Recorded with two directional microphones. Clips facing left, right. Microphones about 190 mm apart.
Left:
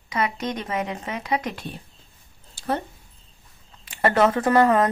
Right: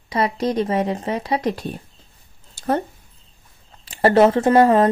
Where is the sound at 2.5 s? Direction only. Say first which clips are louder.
Right 5 dB; 45° right (ahead or behind).